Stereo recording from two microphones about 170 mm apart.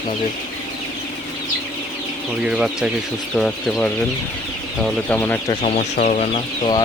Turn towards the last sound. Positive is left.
turn(degrees=40)  # may be behind; listen again after turning